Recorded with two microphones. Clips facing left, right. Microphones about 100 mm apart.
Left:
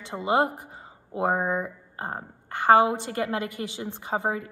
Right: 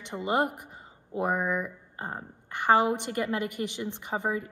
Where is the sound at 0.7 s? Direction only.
20° left (ahead or behind).